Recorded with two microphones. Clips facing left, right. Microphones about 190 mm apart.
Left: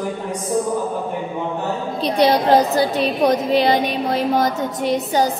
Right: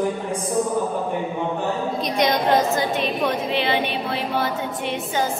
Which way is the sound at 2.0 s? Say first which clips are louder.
Left 6 dB; 30° left (ahead or behind).